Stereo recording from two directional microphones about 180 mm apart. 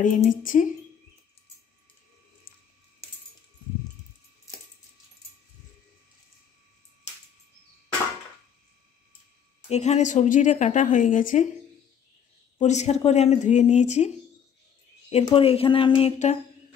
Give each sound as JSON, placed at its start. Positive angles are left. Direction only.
{"t": 0.0, "sound": "a woman's voice", "side_deg": 45}
{"t": 9.7, "sound": "a woman's voice", "side_deg": 40}
{"t": 12.5, "sound": "speech", "side_deg": 40}
{"t": 15.2, "sound": "speech", "side_deg": 30}